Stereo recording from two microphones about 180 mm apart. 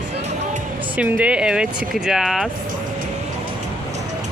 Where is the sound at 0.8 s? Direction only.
10° right (ahead or behind).